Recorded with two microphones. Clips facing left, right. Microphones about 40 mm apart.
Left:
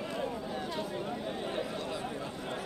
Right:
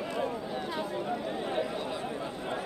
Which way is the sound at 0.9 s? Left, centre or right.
Centre.